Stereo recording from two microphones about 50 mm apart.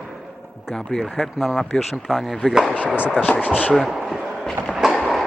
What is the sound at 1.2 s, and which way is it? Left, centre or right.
Speech, centre.